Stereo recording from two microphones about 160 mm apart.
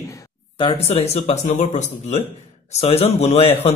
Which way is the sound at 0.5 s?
35° left (ahead or behind).